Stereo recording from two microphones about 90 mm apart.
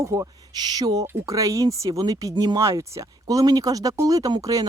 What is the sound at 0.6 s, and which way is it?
A man's voice, 50° right (ahead or behind).